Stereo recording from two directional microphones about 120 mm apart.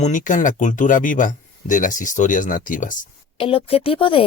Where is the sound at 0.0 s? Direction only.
90° left.